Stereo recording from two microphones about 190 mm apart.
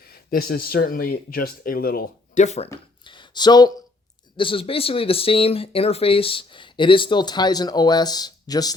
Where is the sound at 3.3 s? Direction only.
20° left (ahead or behind).